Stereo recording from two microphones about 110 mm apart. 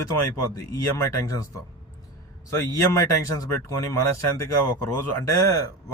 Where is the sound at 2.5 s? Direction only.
25° left (ahead or behind).